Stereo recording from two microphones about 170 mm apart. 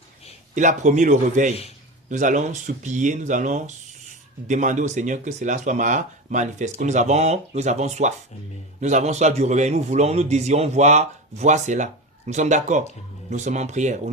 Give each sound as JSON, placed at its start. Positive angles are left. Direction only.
{"t": 0.5, "sound": "a man's voice", "side_deg": -45}